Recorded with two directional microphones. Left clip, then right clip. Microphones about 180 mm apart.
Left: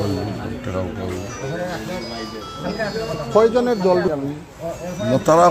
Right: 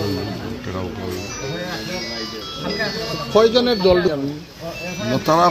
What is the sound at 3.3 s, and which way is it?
Speech, 50° right (ahead or behind).